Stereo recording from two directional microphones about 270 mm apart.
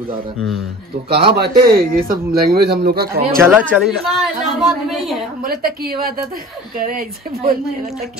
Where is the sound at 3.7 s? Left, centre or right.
Centre.